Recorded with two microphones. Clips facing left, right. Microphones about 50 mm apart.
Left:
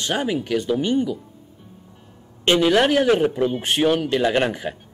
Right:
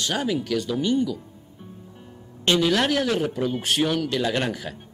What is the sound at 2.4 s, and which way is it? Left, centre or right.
A man's voice, left.